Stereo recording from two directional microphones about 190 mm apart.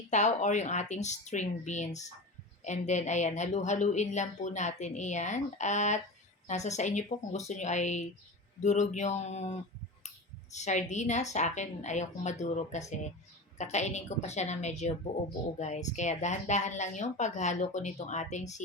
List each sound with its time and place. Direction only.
0.1 s a woman's voice: 40° left (ahead or behind)